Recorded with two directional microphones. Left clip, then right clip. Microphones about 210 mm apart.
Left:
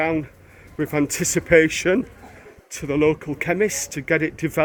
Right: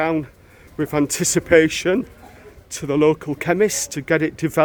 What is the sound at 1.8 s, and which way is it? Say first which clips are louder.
Speech: even; 10° right (ahead or behind).